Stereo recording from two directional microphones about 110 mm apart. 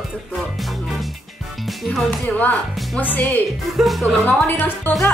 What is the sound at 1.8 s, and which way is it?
Speech, 5° left (ahead or behind).